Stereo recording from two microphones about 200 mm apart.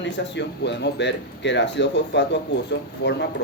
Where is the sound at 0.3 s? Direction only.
60° left (ahead or behind).